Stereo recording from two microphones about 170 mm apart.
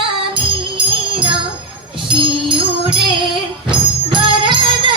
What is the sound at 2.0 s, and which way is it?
Music, 30° right (ahead or behind).